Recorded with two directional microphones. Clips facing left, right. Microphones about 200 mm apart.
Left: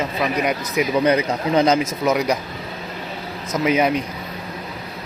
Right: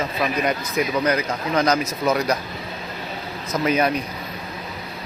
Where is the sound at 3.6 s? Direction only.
15° left (ahead or behind).